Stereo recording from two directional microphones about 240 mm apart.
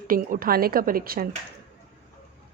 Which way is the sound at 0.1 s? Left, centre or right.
Right.